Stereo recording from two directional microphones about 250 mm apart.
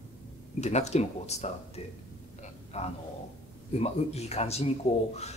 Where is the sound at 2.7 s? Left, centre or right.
Left.